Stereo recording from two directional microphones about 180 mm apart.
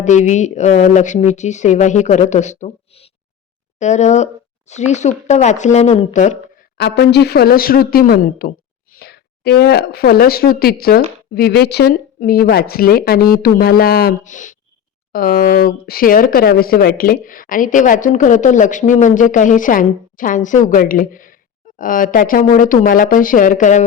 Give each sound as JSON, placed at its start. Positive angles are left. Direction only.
{"t": 0.0, "sound": "speech", "side_deg": 40}
{"t": 3.8, "sound": "speech", "side_deg": 40}
{"t": 6.7, "sound": "speech", "side_deg": 65}